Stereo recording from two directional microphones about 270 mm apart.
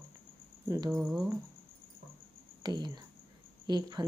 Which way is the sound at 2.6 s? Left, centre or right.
Centre.